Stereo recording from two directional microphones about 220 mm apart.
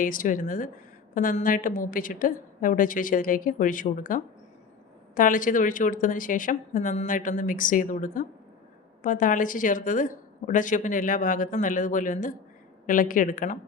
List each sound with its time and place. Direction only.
0.0 s a woman's voice: 40° left (ahead or behind)